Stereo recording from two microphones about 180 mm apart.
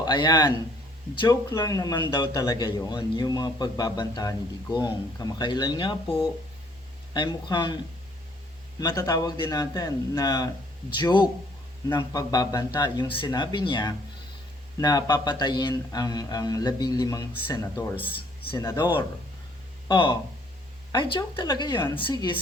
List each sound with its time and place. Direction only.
0.0 s a man's voice: 25° left (ahead or behind)
1.5 s a man's voice: 20° left (ahead or behind)
7.1 s a man's voice: 25° left (ahead or behind)
8.8 s a man's voice: 20° left (ahead or behind)
17.9 s speech: 10° right (ahead or behind)
18.5 s a man's voice: 20° left (ahead or behind)